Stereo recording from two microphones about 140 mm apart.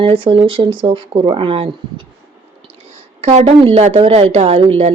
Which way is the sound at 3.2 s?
55° right (ahead or behind).